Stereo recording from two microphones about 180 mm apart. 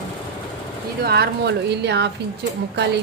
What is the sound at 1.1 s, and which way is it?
Speech, 65° right (ahead or behind).